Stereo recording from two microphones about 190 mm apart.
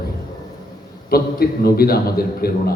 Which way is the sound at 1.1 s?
55° left (ahead or behind).